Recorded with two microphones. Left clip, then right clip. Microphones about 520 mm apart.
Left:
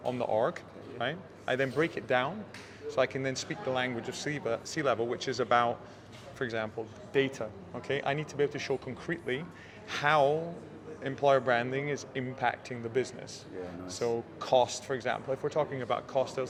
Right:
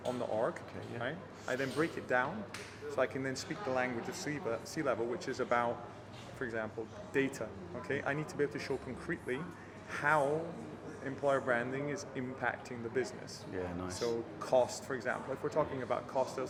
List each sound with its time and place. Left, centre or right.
0.2 s a sound: left
1.0 s speech: left
7.1 s speech: left